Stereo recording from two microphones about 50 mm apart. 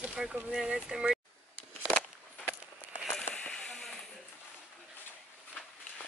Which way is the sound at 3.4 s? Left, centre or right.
Centre.